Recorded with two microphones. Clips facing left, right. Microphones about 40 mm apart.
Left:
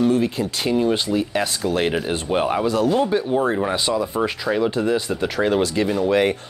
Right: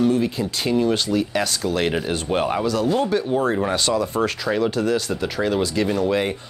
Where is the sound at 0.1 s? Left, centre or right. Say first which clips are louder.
Left 1 dB; left.